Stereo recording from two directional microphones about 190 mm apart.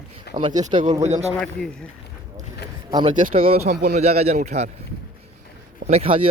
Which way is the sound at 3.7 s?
60° right (ahead or behind).